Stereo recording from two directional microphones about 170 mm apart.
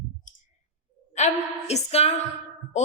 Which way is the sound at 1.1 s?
40° left (ahead or behind).